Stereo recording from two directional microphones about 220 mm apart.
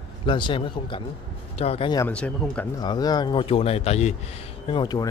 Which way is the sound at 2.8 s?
20° left (ahead or behind).